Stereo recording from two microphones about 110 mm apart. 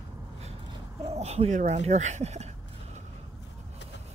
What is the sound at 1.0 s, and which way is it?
Speech, 85° right.